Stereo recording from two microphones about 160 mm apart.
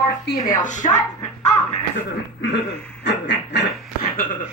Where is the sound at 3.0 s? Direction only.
90° left.